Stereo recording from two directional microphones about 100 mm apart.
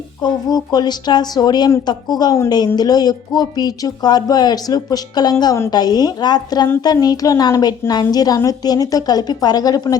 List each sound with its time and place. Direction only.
0.2 s a woman's voice: 40° left (ahead or behind)